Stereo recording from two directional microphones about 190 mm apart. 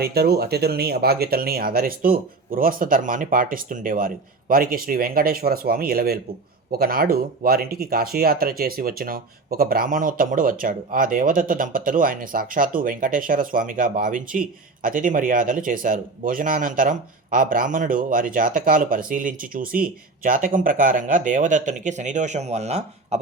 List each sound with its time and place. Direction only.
0.0 s speech: 55° right (ahead or behind); by 23.2 s 35° right (ahead or behind)